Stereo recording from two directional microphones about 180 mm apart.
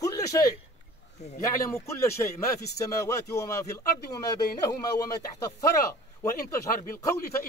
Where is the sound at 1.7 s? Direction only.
15° left (ahead or behind).